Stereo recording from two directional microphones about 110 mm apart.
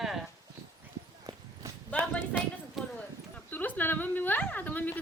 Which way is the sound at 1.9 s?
15° left (ahead or behind).